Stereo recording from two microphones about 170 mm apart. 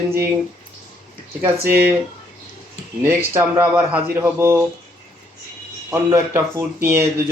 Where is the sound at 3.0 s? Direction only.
15° right (ahead or behind).